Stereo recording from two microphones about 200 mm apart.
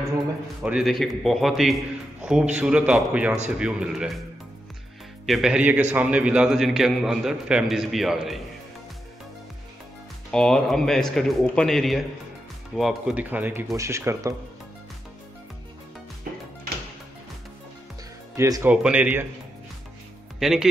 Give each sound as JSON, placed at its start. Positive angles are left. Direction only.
{"t": 0.6, "sound": "a man's voice", "side_deg": 0}
{"t": 5.2, "sound": "a man's voice", "side_deg": 0}
{"t": 10.3, "sound": "a man's voice", "side_deg": 5}
{"t": 16.3, "sound": "music", "side_deg": -45}
{"t": 18.3, "sound": "speech", "side_deg": -15}
{"t": 20.3, "sound": "speech", "side_deg": 0}